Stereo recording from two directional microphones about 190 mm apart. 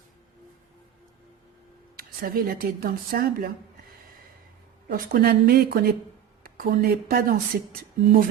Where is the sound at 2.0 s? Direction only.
50° right (ahead or behind).